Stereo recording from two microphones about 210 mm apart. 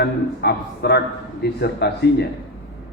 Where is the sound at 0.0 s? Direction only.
50° left (ahead or behind).